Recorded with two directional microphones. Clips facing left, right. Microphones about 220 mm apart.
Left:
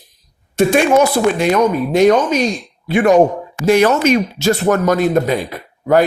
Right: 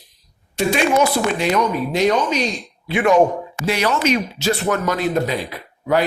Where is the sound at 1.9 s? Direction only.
50° left (ahead or behind).